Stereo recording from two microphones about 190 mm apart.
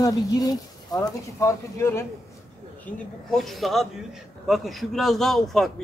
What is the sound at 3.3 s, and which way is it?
Speech, centre (ahead or behind).